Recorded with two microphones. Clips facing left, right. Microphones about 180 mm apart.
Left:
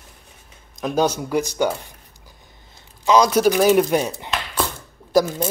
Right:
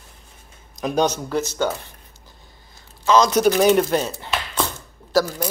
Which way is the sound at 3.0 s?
10° left (ahead or behind).